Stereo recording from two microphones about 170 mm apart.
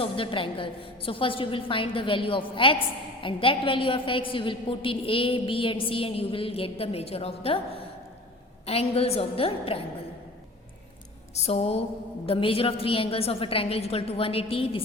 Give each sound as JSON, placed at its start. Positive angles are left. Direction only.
{"t": 0.0, "sound": "a woman's voice", "side_deg": 30}
{"t": 8.6, "sound": "a woman's voice", "side_deg": 35}
{"t": 11.3, "sound": "a woman's voice", "side_deg": 40}